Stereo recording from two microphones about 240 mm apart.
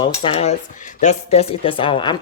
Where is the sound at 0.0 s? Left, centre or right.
Left.